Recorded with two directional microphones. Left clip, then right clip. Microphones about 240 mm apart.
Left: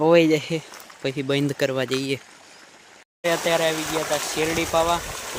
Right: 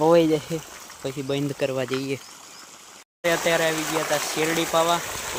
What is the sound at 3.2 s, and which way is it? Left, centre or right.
Speech, centre.